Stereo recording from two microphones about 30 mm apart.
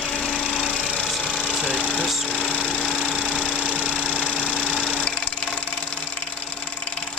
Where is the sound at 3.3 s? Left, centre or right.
Right.